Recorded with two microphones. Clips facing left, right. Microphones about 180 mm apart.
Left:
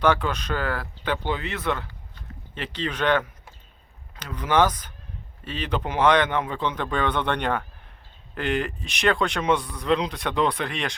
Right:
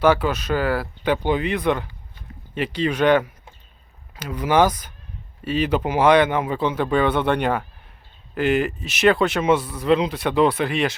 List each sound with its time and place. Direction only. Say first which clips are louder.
0.0 s speech: right 4 dB; 5° right (ahead or behind)